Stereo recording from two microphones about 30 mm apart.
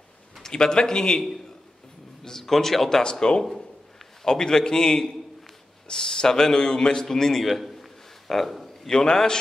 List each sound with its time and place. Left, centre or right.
0.4 s a man's voice: left
2.2 s a man's voice: centre
3.0 s a man's voice: left
7.4 s a sound: centre
8.3 s a man's voice: centre
8.8 s a man's voice: left